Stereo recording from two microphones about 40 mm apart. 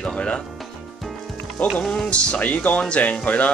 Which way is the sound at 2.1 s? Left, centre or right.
Left.